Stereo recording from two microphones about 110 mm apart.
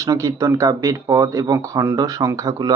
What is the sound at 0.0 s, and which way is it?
Speech, 30° right (ahead or behind).